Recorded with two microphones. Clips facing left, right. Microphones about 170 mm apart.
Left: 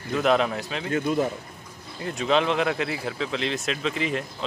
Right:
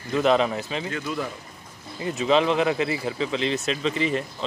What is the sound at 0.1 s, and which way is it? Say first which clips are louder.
Speech: right 1 dB; centre (ahead or behind).